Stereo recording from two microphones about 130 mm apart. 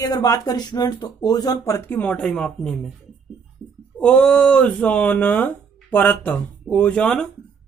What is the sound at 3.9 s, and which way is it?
Speech, 10° left (ahead or behind).